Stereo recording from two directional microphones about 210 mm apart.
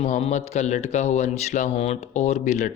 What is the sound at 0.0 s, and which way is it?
Speech, 35° left (ahead or behind).